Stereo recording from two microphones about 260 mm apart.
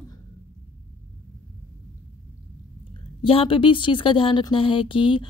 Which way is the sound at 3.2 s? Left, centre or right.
Centre.